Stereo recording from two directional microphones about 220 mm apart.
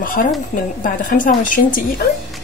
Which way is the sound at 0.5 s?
40° left (ahead or behind).